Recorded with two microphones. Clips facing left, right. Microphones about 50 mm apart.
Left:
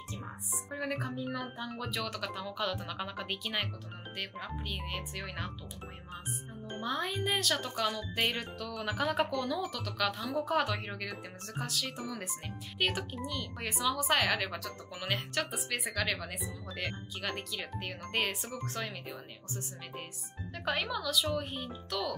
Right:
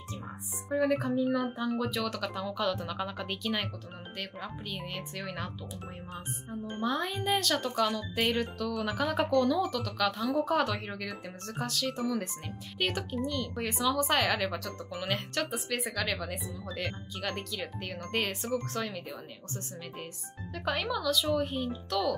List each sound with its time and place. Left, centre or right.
0.7 s speech: centre
6.8 s speech: centre
20.6 s speech: centre